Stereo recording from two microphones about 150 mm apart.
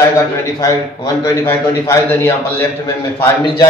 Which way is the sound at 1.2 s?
20° left (ahead or behind).